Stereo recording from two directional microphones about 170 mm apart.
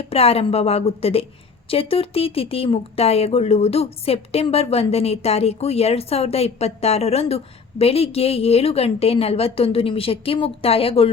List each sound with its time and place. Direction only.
0.0 s speech: 35° left (ahead or behind)